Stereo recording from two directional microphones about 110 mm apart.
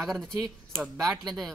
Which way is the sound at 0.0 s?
Centre (ahead or behind).